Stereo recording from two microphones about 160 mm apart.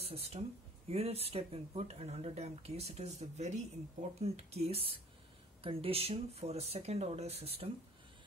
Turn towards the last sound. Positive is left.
turn(degrees=-40)  # may be behind; listen again after turning